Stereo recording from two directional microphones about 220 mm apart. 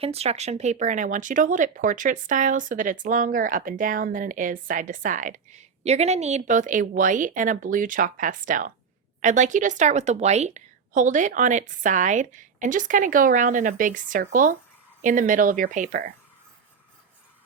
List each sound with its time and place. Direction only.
0.0 s speech: 30° right (ahead or behind)